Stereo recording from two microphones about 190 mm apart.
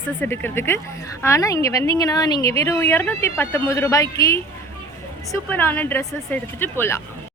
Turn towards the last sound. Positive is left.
turn(degrees=10)  # may be behind; listen again after turning